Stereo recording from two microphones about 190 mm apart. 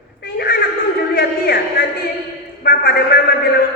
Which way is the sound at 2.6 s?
50° left (ahead or behind).